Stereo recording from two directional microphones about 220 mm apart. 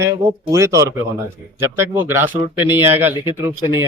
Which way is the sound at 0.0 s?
10° right (ahead or behind).